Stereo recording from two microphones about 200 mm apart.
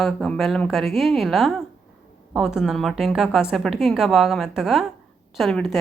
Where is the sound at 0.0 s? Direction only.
Centre (ahead or behind).